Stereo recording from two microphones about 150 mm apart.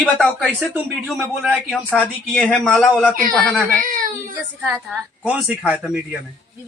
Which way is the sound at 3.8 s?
65° right (ahead or behind).